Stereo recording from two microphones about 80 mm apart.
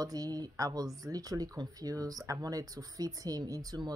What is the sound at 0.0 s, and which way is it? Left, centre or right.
Speech, right.